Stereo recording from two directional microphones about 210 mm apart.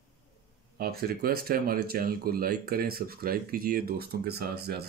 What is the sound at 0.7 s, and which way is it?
Speech, 45° right (ahead or behind).